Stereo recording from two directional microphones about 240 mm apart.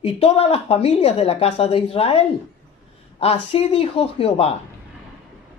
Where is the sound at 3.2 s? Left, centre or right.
Left.